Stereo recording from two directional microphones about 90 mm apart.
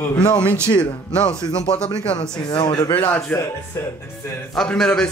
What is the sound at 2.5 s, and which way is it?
Speech, 60° left (ahead or behind).